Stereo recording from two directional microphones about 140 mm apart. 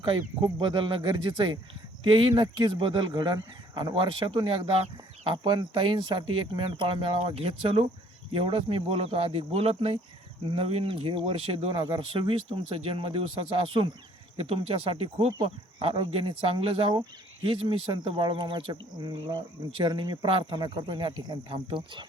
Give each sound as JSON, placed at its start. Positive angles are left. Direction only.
{"t": 0.0, "sound": "speech", "side_deg": -35}